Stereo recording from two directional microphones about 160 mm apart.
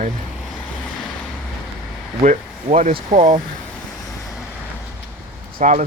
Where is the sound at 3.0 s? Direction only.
50° right (ahead or behind).